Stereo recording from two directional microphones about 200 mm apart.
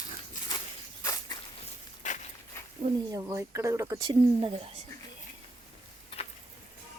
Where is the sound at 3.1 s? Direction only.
15° right (ahead or behind).